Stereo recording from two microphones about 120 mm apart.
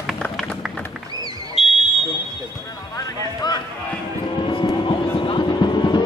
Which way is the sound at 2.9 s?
35° left (ahead or behind).